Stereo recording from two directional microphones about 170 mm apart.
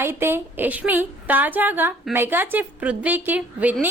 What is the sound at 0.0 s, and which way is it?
A woman's voice, 15° right (ahead or behind).